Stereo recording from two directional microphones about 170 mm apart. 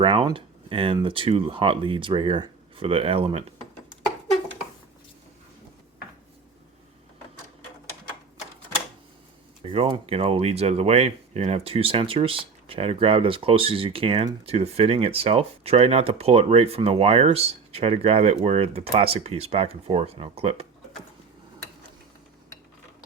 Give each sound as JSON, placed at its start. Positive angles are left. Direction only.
{"t": 0.0, "sound": "speech", "side_deg": -30}
{"t": 9.6, "sound": "speech", "side_deg": -35}